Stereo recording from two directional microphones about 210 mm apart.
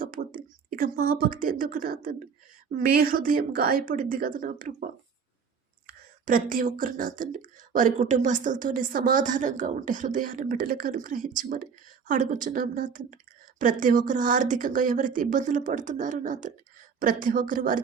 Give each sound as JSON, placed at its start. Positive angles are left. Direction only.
{"t": 0.0, "sound": "a woman's voice", "side_deg": -40}